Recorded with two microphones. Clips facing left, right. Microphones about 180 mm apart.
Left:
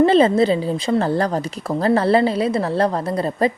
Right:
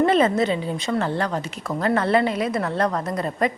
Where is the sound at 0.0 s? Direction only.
30° left (ahead or behind).